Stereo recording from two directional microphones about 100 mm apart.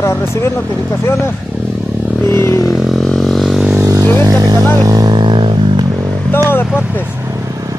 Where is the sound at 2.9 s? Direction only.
5° left (ahead or behind).